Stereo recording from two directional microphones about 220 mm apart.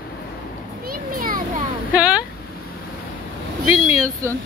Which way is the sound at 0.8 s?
40° right (ahead or behind).